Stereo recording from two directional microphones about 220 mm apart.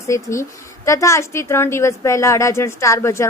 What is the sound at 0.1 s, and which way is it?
A woman's voice, 15° left (ahead or behind).